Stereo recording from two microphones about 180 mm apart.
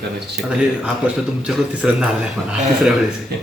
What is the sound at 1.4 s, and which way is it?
Speech, 5° right (ahead or behind).